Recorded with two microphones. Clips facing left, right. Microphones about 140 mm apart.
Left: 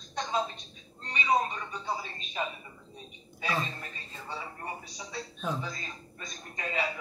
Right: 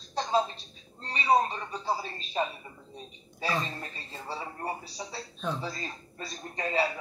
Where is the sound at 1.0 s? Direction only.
35° right (ahead or behind).